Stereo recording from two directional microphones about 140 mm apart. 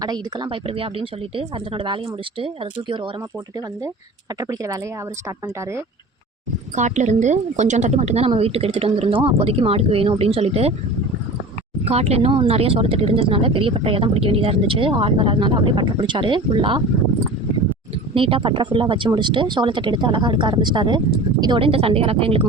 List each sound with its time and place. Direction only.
0.0 s speech: 30° right (ahead or behind)
4.4 s speech: 25° right (ahead or behind)
6.7 s a woman's voice: 55° right (ahead or behind)
11.9 s speech: 50° right (ahead or behind)
18.1 s speech: 40° right (ahead or behind)